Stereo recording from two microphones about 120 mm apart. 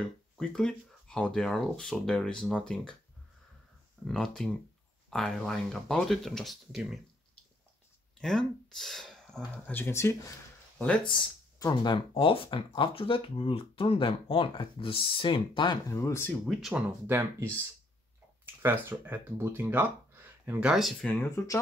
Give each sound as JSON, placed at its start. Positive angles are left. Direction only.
{"t": 0.4, "sound": "speech", "side_deg": 5}
{"t": 4.0, "sound": "speech", "side_deg": 5}
{"t": 8.2, "sound": "speech", "side_deg": 5}
{"t": 9.7, "sound": "speech", "side_deg": 20}
{"t": 10.8, "sound": "speech", "side_deg": 10}
{"t": 11.6, "sound": "speech", "side_deg": 40}
{"t": 15.9, "sound": "speech", "side_deg": 25}
{"t": 16.7, "sound": "speech", "side_deg": -20}
{"t": 21.0, "sound": "speech", "side_deg": 15}